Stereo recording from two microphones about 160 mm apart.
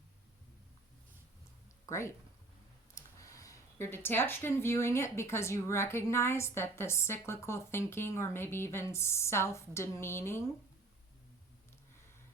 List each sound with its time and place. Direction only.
1.9 s speech: 15° left (ahead or behind)